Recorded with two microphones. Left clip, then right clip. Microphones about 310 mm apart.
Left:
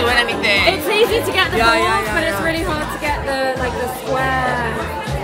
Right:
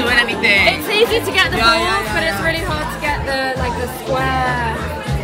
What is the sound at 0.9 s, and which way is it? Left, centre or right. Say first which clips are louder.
Speech: even; right.